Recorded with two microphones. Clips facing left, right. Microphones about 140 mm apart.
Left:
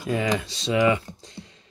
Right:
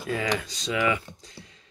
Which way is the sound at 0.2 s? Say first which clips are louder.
Left 3 dB; 30° left (ahead or behind).